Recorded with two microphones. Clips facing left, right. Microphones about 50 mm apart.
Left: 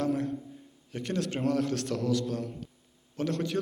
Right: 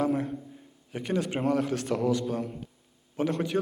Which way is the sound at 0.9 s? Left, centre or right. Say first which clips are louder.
Right 3 dB; centre.